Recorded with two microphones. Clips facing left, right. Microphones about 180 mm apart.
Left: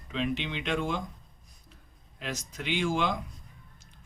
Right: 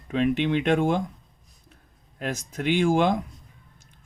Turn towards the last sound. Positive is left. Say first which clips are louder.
# right 8 dB
turn(degrees=-50)  # may be behind; listen again after turning